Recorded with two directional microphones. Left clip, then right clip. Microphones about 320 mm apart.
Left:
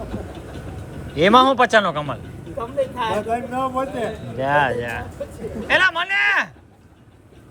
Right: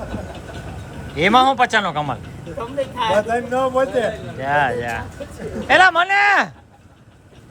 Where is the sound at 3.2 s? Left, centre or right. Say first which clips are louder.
Right 3 dB; right.